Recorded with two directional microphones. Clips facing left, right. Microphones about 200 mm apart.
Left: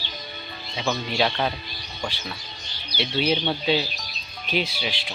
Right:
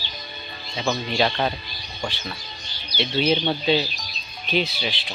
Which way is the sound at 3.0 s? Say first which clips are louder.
Right 2 dB; 10° left (ahead or behind).